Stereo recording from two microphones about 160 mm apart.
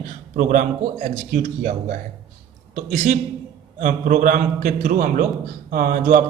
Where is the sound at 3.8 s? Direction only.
55° right (ahead or behind).